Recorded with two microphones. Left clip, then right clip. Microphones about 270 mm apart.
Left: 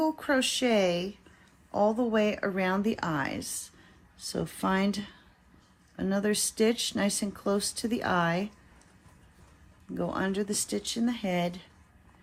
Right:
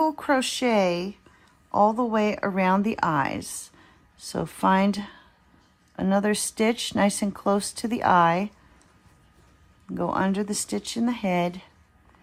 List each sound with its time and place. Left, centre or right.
0.0 s speech: right
10.0 s speech: right